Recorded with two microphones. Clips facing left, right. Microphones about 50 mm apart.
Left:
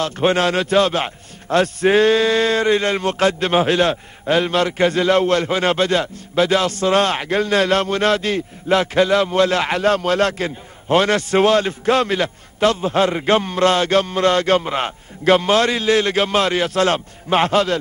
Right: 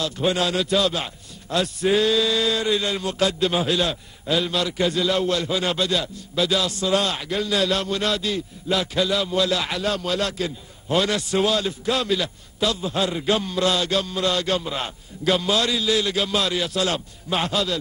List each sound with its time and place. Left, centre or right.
0.0 s a man's voice: left